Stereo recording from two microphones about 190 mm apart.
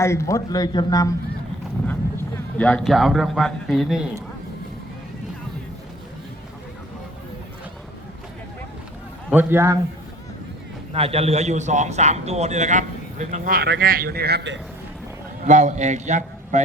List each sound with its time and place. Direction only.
0.0 s speech: 15° left (ahead or behind)
2.6 s a man's voice: 5° left (ahead or behind)
9.3 s a man's voice: 10° right (ahead or behind)
10.9 s a man's voice: 30° right (ahead or behind); by 14.6 s 65° right (ahead or behind)
15.4 s a man's voice: 40° right (ahead or behind)